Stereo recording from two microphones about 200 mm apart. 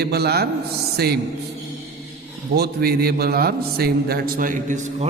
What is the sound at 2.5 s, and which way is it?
A man's voice, 50° right (ahead or behind).